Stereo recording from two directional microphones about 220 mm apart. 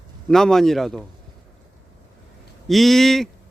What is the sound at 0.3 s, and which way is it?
Speech, centre (ahead or behind).